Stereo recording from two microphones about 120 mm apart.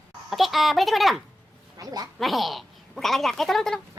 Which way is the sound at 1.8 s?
30° right (ahead or behind).